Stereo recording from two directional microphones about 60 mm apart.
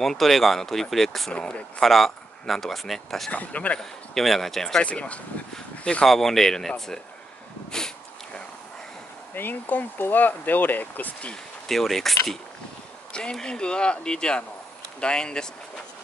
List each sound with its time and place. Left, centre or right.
0.0 s speech: centre
1.3 s speech: centre
1.8 s speech: centre
3.3 s speech: left
4.1 s speech: centre
4.8 s speech: left
6.0 s speech: centre
7.7 s a sound: centre
9.3 s speech: left
11.6 s speech: centre
13.1 s speech: centre